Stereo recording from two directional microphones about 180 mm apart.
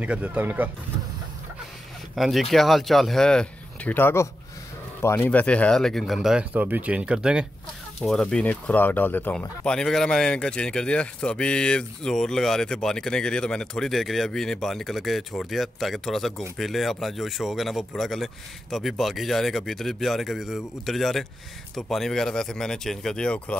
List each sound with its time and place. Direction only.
0.0 s speech: 5° right (ahead or behind)
2.1 s speech: centre (ahead or behind)